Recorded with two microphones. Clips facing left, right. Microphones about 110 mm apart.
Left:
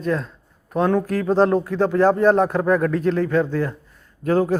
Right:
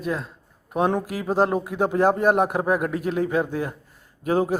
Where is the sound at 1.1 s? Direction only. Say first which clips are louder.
Left 4 dB; 10° right (ahead or behind).